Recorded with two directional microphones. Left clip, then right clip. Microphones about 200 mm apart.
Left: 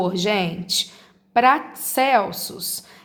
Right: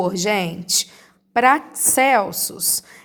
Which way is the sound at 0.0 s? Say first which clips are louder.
Right 1 dB; 40° right (ahead or behind).